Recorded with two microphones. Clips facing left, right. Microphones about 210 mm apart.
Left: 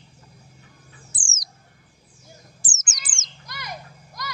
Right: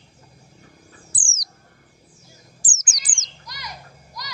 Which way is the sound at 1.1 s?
25° left (ahead or behind).